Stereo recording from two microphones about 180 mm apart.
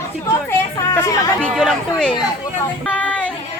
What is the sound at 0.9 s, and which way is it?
Chatter, 10° left (ahead or behind).